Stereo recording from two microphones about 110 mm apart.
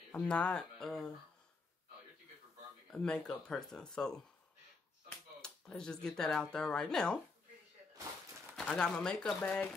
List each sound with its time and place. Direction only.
0.1 s speech: 10° left (ahead or behind)
2.9 s speech: 10° left (ahead or behind)
5.4 s speech: 5° left (ahead or behind)
8.5 s speech: 5° left (ahead or behind)